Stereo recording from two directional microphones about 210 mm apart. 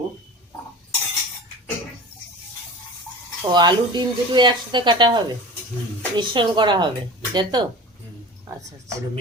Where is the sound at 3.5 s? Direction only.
20° right (ahead or behind).